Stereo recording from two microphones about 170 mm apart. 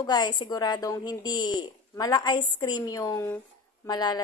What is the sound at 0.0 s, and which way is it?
A woman's voice, 25° left (ahead or behind).